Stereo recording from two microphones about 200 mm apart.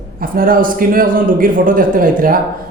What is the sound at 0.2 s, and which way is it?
Speech, 45° right (ahead or behind).